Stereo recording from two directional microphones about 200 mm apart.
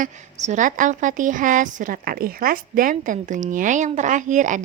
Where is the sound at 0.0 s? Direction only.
35° right (ahead or behind).